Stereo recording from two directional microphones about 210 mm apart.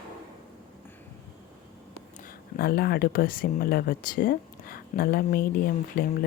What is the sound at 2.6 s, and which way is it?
Speech, 45° left (ahead or behind).